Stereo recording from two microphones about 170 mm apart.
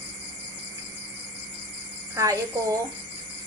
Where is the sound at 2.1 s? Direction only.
20° right (ahead or behind).